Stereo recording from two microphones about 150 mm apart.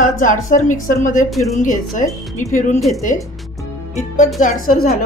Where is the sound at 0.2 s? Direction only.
60° left (ahead or behind).